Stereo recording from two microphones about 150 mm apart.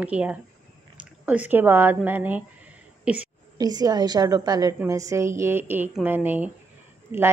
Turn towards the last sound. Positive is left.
turn(degrees=-15)  # may be behind; listen again after turning